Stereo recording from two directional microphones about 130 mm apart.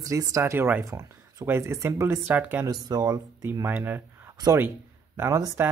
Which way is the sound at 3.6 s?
15° right (ahead or behind).